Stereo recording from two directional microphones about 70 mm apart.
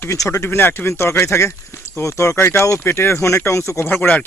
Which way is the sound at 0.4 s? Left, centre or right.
Left.